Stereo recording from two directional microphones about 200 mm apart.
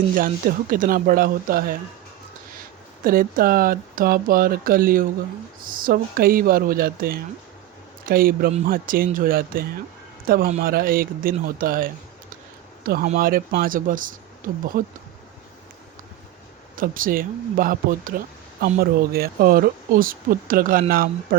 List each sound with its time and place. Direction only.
0.1 s speech: 45° right (ahead or behind)
3.0 s speech: 45° right (ahead or behind)
16.7 s speech: 45° right (ahead or behind)